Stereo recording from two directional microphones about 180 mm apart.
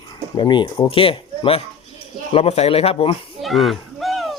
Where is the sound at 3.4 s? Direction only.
Centre (ahead or behind).